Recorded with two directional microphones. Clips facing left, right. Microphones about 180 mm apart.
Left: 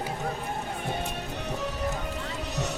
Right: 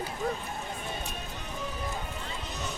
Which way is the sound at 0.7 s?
65° left (ahead or behind).